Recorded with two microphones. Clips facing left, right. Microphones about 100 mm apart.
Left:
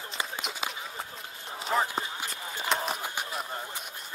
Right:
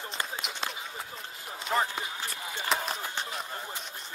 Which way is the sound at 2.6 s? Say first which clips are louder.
Left 1 dB; centre (ahead or behind).